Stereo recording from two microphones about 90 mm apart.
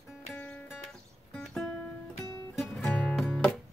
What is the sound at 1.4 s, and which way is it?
Music, 5° left (ahead or behind).